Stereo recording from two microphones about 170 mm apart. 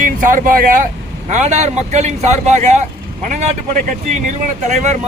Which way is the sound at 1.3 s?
45° right (ahead or behind).